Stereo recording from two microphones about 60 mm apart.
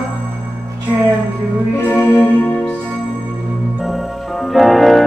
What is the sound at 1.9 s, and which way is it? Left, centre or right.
Music, left.